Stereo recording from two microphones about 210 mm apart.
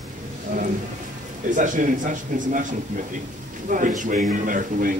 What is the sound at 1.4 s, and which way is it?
Speech, 40° right (ahead or behind).